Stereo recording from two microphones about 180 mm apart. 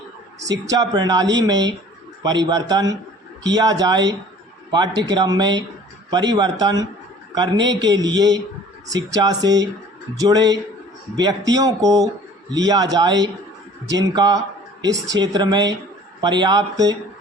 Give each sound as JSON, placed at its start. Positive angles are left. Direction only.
{"t": 0.4, "sound": "a man's voice", "side_deg": -20}